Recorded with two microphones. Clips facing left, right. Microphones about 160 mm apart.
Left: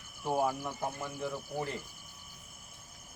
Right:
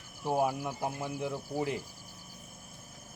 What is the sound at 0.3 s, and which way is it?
Speech, 10° right (ahead or behind).